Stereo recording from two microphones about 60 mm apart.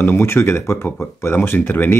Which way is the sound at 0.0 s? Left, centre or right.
Left.